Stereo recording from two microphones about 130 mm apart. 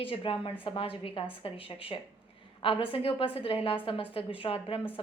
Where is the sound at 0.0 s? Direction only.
45° left (ahead or behind).